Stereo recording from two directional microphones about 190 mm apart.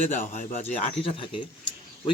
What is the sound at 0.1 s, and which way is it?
Speech, 40° left (ahead or behind).